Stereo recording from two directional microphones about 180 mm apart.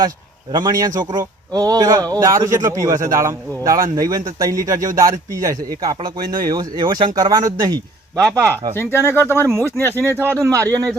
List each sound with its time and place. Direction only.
0.5 s a man's voice: 20° right (ahead or behind)
9.0 s speech: 10° left (ahead or behind)
9.5 s a man's voice: 15° right (ahead or behind)